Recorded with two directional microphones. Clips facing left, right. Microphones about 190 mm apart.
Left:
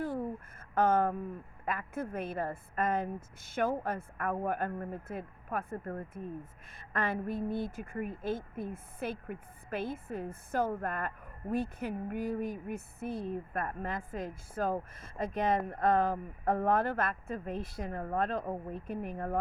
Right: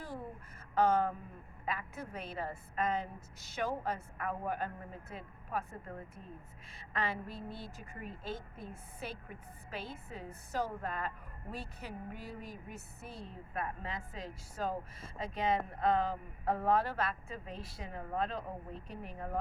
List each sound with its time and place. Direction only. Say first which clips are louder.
0.8 s speech: left 2 dB; 50° left (ahead or behind)